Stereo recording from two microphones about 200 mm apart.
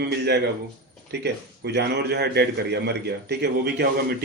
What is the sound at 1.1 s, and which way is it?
A man's voice, 55° right (ahead or behind).